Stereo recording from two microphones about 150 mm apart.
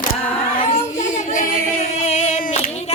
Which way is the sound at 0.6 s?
50° left (ahead or behind).